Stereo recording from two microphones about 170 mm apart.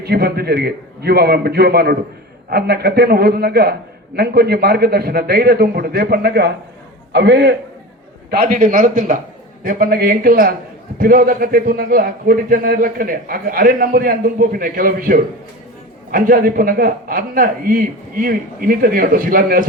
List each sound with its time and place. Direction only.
0.0 s a man's voice: 65° right (ahead or behind)
7.1 s a man's voice: 80° right
8.3 s a man's voice: 60° right (ahead or behind)